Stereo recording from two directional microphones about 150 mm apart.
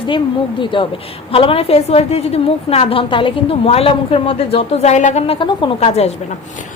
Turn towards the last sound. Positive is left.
turn(degrees=45)  # may be behind; listen again after turning